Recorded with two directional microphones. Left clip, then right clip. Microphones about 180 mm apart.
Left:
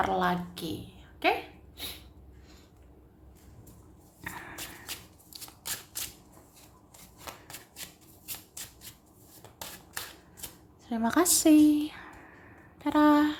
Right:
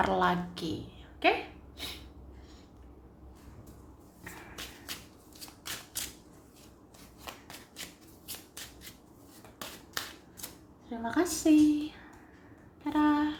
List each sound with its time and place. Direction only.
0.0 s a woman's voice: centre (ahead or behind)
10.8 s a woman's voice: 30° left (ahead or behind)